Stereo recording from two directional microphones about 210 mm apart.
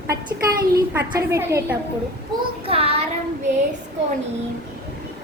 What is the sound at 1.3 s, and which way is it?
Speech, 15° right (ahead or behind).